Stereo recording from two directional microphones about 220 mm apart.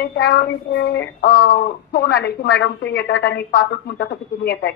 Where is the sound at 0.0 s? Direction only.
50° left (ahead or behind).